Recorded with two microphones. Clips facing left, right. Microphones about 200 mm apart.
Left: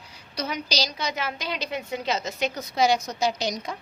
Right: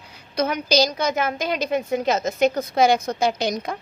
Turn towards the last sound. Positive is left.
turn(degrees=-55)  # may be behind; listen again after turning